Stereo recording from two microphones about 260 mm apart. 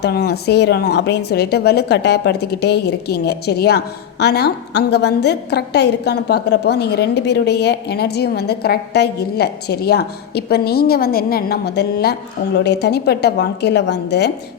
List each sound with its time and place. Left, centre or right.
0.0 s a woman's voice: left